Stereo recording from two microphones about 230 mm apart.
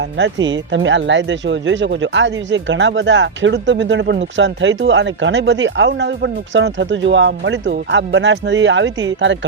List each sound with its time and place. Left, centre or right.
0.0 s speech: right